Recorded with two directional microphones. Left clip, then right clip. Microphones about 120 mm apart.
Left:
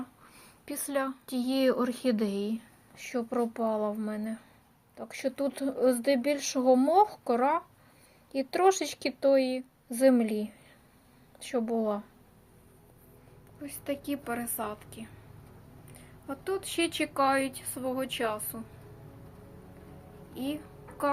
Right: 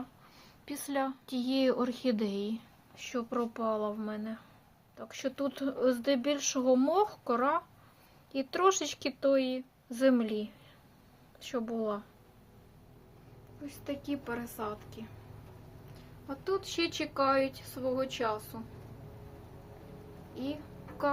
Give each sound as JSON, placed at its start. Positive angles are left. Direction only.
{"t": 0.3, "sound": "a woman's voice", "side_deg": 5}
{"t": 13.7, "sound": "a woman's voice", "side_deg": 45}
{"t": 16.3, "sound": "speech", "side_deg": 25}
{"t": 20.3, "sound": "a woman's voice", "side_deg": 30}